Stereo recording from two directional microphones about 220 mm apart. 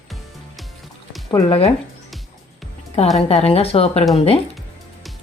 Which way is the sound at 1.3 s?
25° left (ahead or behind).